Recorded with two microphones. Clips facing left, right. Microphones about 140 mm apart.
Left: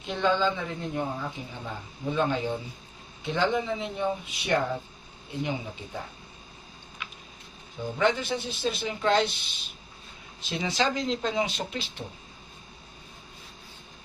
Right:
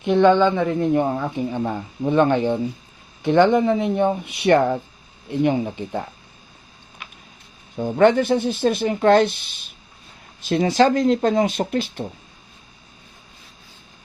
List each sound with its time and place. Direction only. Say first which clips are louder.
0.0 s speech: right 11 dB; 60° right (ahead or behind)
7.8 s speech: right 10 dB; 55° right (ahead or behind)